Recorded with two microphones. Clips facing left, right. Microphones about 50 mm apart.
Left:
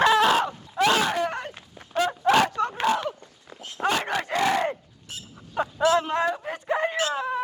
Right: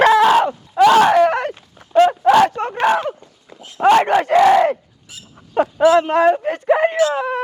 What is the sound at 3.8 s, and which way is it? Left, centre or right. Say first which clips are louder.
Speech: right 13 dB; right.